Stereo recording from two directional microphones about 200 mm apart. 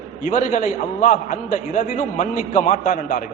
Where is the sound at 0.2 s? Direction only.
40° left (ahead or behind).